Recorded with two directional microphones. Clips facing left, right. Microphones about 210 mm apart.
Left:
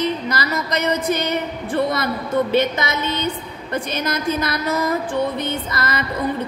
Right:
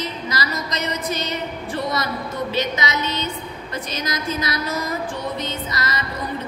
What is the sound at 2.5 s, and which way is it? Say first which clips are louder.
Music: left 4 dB; 55° left (ahead or behind).